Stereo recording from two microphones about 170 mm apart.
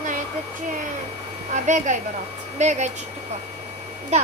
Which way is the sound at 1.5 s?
45° right (ahead or behind).